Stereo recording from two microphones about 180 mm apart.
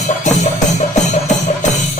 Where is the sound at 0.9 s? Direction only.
40° left (ahead or behind).